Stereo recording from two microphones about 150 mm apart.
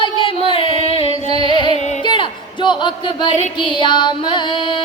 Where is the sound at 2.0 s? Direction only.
30° left (ahead or behind).